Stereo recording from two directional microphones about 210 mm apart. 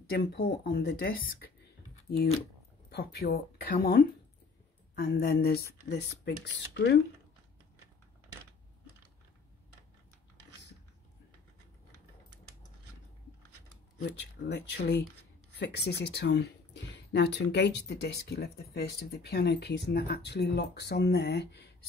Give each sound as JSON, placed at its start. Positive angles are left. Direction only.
{"t": 0.1, "sound": "speech", "side_deg": 50}
{"t": 2.9, "sound": "speech", "side_deg": 50}
{"t": 13.9, "sound": "speech", "side_deg": 50}